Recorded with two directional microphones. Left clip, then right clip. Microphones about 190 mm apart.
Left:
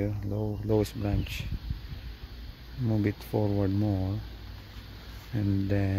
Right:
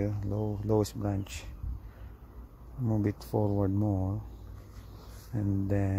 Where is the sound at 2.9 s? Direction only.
Centre (ahead or behind).